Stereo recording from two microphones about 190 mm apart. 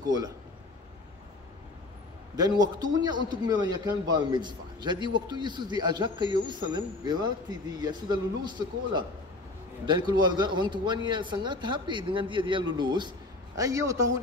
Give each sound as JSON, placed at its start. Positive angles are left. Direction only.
{"t": 2.3, "sound": "a man's voice", "side_deg": -20}